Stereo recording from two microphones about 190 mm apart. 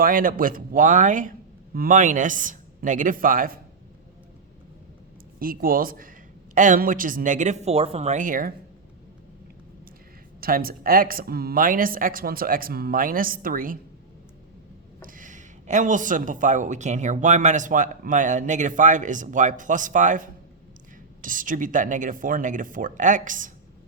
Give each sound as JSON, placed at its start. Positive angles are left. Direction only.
{"t": 0.0, "sound": "a woman's voice", "side_deg": -45}
{"t": 5.4, "sound": "a woman's voice", "side_deg": -50}
{"t": 10.4, "sound": "a woman's voice", "side_deg": -50}
{"t": 15.0, "sound": "a woman's voice", "side_deg": -45}